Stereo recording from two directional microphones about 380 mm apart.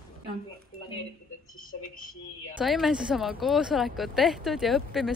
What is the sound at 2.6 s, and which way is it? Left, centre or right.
Speech, centre.